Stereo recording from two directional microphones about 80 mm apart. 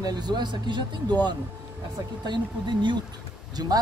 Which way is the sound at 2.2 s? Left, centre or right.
Right.